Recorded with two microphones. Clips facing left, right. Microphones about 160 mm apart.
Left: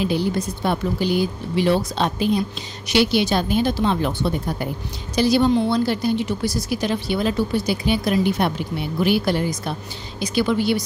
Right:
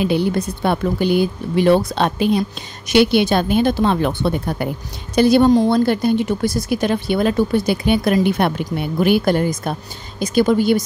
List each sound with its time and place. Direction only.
0.0 s a woman's voice: 60° right (ahead or behind); by 10.8 s 45° right (ahead or behind)